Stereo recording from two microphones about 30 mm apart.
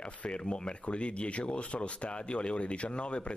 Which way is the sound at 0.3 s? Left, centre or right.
Left.